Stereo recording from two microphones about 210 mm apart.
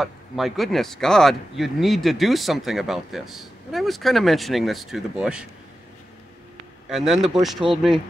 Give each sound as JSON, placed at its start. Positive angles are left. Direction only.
{"t": 0.0, "sound": "speech", "side_deg": 0}
{"t": 6.9, "sound": "speech", "side_deg": 0}
{"t": 7.7, "sound": "speech", "side_deg": -25}